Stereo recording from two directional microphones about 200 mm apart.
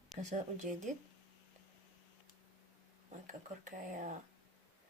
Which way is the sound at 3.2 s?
40° right (ahead or behind).